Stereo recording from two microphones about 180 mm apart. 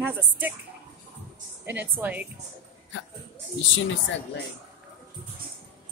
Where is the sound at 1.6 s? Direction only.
10° right (ahead or behind).